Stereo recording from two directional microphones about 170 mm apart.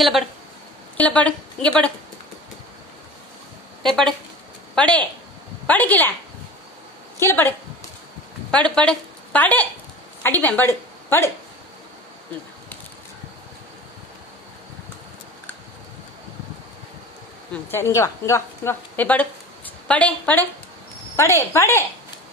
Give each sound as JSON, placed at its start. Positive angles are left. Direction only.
{"t": 0.9, "sound": "a woman's voice", "side_deg": 5}
{"t": 3.8, "sound": "a woman's voice", "side_deg": 0}
{"t": 7.2, "sound": "a woman's voice", "side_deg": 15}
{"t": 17.5, "sound": "a woman's voice", "side_deg": 15}